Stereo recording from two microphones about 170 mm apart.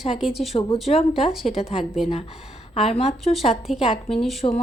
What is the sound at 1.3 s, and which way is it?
Speech, centre (ahead or behind).